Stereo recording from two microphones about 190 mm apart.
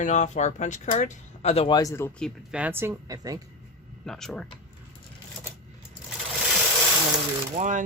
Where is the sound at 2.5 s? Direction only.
5° right (ahead or behind).